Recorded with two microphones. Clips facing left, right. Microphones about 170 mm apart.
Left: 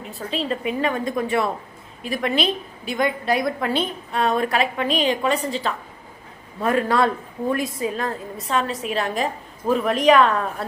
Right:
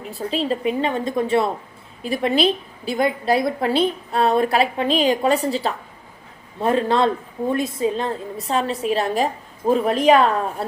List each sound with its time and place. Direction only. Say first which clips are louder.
0.1 s a woman's voice: right 3 dB; 35° right (ahead or behind)